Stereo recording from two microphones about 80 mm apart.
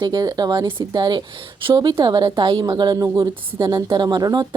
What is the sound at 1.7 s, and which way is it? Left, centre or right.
A woman's voice, right.